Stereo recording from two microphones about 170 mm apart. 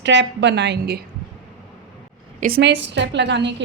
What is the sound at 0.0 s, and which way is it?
A woman's voice, 90° right.